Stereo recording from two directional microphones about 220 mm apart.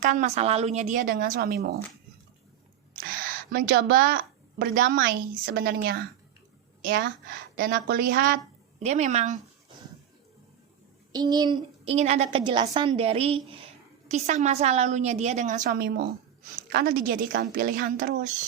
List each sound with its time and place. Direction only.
0.0 s a woman's voice: 35° right (ahead or behind)
3.0 s a woman's voice: 40° right (ahead or behind)
11.1 s a woman's voice: 20° right (ahead or behind); by 18.3 s 35° right (ahead or behind)